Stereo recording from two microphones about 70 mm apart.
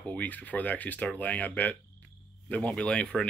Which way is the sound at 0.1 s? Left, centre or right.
Left.